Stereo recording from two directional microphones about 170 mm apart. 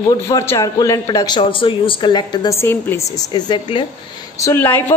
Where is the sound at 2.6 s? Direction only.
15° left (ahead or behind).